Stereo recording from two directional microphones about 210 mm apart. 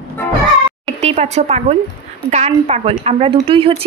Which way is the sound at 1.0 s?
30° right (ahead or behind).